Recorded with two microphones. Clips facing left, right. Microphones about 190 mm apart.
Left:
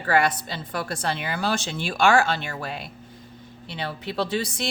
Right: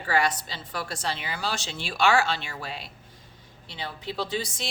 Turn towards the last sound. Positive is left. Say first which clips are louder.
# left 5 dB
turn(degrees=65)  # may be behind; listen again after turning